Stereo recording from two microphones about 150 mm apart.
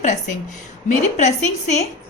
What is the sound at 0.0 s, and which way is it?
A woman's voice, 55° left (ahead or behind).